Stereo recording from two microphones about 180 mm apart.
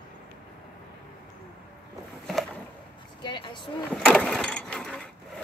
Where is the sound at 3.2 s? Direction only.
25° left (ahead or behind).